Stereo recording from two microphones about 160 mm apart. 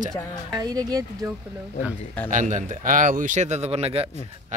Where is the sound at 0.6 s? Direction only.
25° right (ahead or behind).